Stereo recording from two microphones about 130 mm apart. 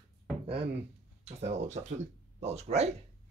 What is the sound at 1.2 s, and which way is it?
Speech, 60° right (ahead or behind).